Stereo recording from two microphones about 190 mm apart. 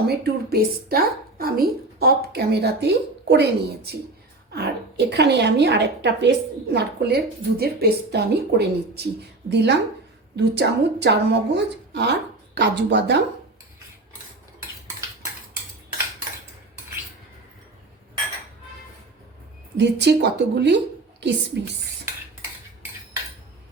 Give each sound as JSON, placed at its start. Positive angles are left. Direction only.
{"t": 0.1, "sound": "a woman's voice", "side_deg": -55}
{"t": 19.7, "sound": "a woman's voice", "side_deg": -65}